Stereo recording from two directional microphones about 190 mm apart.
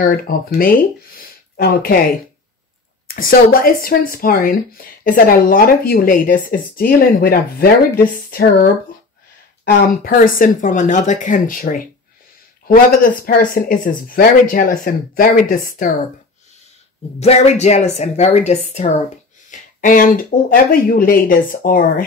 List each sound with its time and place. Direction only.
0.0 s speech: 50° left (ahead or behind)
3.2 s speech: 50° left (ahead or behind)
10.0 s speech: 45° left (ahead or behind)
17.2 s a woman's voice: 35° left (ahead or behind)